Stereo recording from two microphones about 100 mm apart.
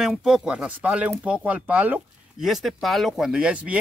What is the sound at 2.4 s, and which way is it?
Speech, centre (ahead or behind).